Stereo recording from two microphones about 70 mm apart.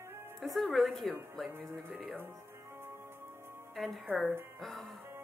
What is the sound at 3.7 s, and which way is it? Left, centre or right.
A woman's voice, centre.